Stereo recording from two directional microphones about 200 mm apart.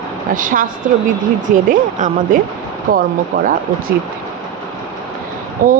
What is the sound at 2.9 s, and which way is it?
Speech, 45° right (ahead or behind).